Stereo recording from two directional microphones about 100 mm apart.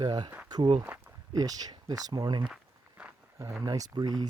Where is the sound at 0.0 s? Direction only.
40° right (ahead or behind).